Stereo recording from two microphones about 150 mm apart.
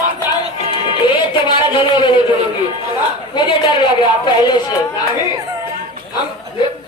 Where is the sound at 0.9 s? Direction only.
35° left (ahead or behind).